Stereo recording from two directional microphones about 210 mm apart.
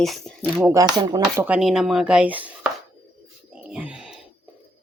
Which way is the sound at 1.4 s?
5° right (ahead or behind).